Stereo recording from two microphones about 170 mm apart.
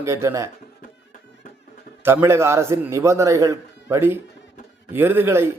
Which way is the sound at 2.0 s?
15° right (ahead or behind).